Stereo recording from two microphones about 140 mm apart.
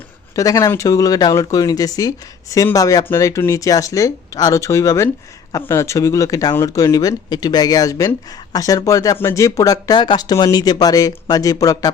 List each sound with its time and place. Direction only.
0.3 s speech: 25° left (ahead or behind)